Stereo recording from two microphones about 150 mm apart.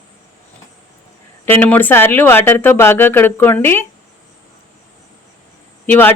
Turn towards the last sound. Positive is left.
turn(degrees=15)  # may be behind; listen again after turning